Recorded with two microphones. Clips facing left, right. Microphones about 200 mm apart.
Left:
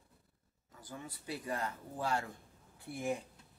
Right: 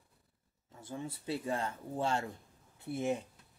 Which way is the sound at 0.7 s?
25° right (ahead or behind).